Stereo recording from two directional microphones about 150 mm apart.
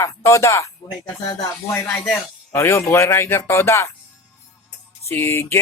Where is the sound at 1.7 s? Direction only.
10° left (ahead or behind).